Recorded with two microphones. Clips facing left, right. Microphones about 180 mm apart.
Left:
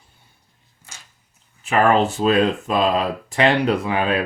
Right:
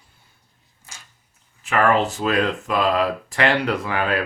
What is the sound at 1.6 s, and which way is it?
Speech, 25° left (ahead or behind).